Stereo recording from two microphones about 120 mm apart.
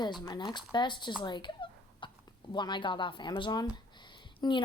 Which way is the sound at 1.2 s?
40° left (ahead or behind).